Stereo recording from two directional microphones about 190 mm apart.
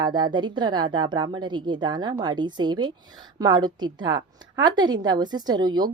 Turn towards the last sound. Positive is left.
turn(degrees=-20)  # may be behind; listen again after turning